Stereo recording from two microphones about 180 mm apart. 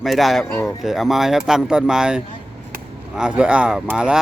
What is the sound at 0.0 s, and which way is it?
Speech, centre (ahead or behind).